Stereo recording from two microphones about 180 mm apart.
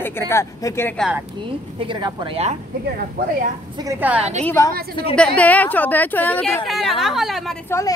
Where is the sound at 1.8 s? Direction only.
30° right (ahead or behind).